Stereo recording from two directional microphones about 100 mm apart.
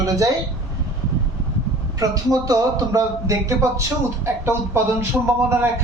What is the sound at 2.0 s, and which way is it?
A woman's voice, 35° right (ahead or behind).